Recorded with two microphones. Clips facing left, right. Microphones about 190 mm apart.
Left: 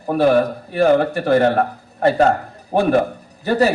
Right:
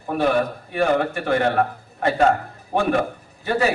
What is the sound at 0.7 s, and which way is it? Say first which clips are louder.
A man's voice: left 6 dB; 40° left (ahead or behind).